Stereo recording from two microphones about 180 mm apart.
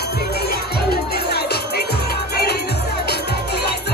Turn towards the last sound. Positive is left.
turn(degrees=60)  # may be behind; listen again after turning